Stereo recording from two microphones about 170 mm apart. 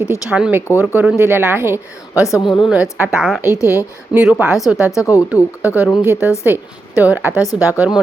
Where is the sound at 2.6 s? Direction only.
5° right (ahead or behind).